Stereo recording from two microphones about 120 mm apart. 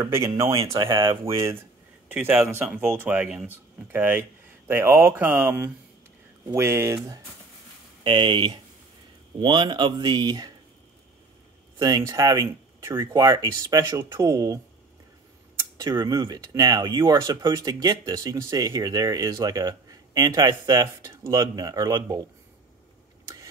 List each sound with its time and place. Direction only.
0.0 s speech: 25° right (ahead or behind)
0.7 s speech: 45° right (ahead or behind)
2.0 s a man's voice: 15° right (ahead or behind)
8.0 s speech: 45° right (ahead or behind)
11.8 s speech: 30° right (ahead or behind)
15.8 s speech: 35° right (ahead or behind)
23.2 s vehicle: 30° right (ahead or behind)